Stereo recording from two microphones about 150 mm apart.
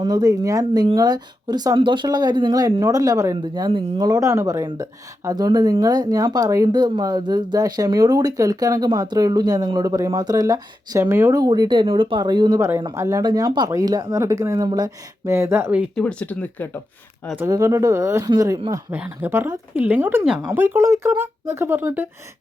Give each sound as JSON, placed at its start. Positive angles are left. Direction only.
{"t": 0.0, "sound": "speech", "side_deg": -25}
{"t": 12.5, "sound": "speech", "side_deg": -20}
{"t": 16.0, "sound": "speech", "side_deg": 5}
{"t": 17.3, "sound": "speech", "side_deg": -20}
{"t": 18.9, "sound": "speech", "side_deg": -10}